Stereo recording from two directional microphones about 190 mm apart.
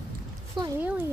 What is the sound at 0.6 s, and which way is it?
Speech, 25° right (ahead or behind).